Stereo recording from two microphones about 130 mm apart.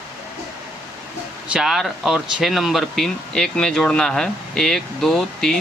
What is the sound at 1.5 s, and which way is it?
Speech, 5° right (ahead or behind).